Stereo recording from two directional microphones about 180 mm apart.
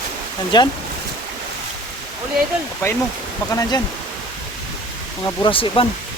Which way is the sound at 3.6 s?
20° left (ahead or behind).